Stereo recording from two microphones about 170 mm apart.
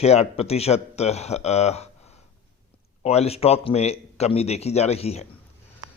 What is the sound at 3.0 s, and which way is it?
A man's voice, 40° left (ahead or behind).